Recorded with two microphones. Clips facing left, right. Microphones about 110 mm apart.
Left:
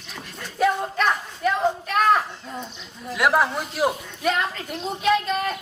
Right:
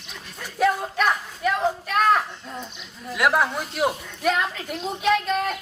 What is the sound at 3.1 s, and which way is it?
A woman's voice, centre (ahead or behind).